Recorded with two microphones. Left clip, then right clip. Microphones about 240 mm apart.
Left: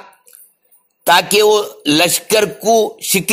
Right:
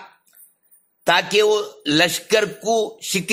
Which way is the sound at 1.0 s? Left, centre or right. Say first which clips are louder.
Left 5 dB; centre.